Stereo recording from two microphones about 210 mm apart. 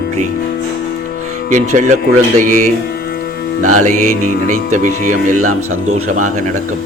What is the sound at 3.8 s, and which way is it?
Speech, 35° right (ahead or behind).